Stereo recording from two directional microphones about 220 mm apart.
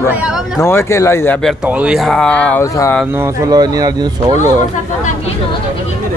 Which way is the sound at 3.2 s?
15° right (ahead or behind).